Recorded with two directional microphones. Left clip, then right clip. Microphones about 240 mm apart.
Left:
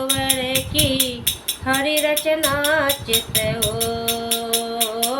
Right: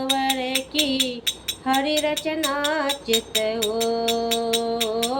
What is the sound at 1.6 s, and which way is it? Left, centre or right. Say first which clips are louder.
Music: left 3 dB; centre.